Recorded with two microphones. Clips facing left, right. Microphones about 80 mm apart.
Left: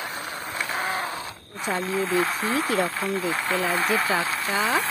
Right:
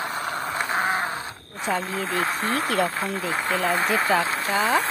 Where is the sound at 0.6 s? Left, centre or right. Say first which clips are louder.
Right 3 dB; right.